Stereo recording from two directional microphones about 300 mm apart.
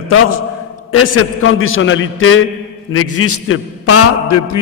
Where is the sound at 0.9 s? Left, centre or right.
Left.